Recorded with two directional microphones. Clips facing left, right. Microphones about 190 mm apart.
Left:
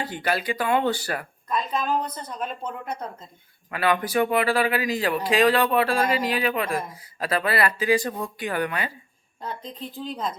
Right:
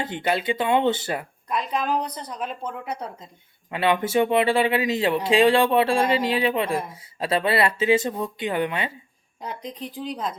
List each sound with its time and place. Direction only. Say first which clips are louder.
0.0 s speech: right 2 dB; 20° right (ahead or behind)
3.7 s speech: right 2 dB; 25° right (ahead or behind)